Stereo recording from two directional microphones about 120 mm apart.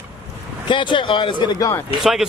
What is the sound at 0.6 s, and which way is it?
Speech, 40° left (ahead or behind).